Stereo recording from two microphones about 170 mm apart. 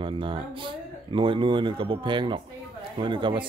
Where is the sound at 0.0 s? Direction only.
30° right (ahead or behind).